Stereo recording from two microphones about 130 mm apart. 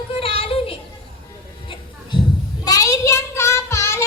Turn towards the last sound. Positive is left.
turn(degrees=20)  # may be behind; listen again after turning